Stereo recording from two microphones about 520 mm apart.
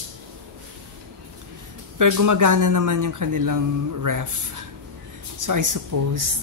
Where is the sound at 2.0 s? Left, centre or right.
Right.